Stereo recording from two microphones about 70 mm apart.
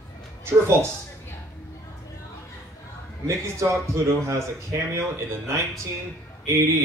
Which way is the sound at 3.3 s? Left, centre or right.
Right.